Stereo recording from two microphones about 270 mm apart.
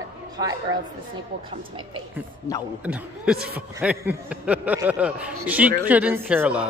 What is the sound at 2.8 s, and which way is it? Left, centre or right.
Speech, centre.